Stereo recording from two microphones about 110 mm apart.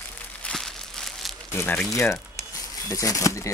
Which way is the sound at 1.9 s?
25° left (ahead or behind).